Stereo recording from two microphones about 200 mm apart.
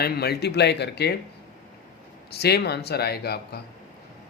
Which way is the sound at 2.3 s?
55° left (ahead or behind).